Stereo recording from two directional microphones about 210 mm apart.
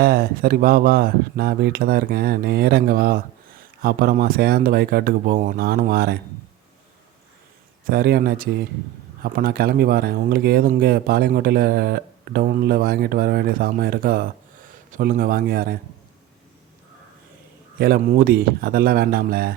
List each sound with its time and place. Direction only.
0.0 s speech: 45° right (ahead or behind)
7.9 s speech: 45° right (ahead or behind)
17.7 s speech: 45° right (ahead or behind)